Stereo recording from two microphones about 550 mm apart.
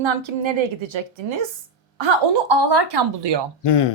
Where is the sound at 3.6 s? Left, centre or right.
Left.